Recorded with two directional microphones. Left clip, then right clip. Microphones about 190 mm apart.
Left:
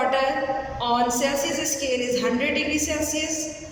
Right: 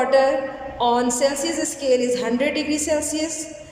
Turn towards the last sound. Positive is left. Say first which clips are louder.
# right 3 dB
turn(degrees=-30)  # may be behind; listen again after turning